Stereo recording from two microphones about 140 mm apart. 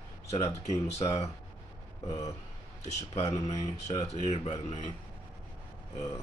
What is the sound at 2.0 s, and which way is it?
Speech, 25° left (ahead or behind).